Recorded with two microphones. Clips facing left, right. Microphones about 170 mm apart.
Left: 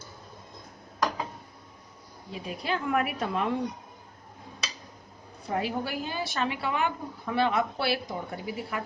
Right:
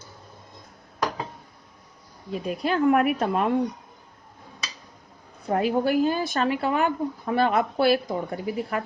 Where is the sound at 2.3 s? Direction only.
50° right (ahead or behind).